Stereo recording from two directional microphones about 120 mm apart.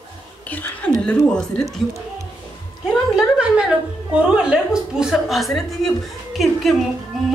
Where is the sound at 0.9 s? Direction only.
5° left (ahead or behind).